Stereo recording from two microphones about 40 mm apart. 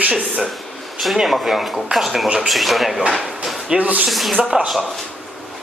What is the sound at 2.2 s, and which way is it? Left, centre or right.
Speech, centre.